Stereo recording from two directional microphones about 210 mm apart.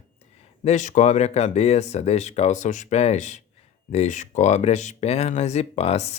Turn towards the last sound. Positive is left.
turn(degrees=30)  # may be behind; listen again after turning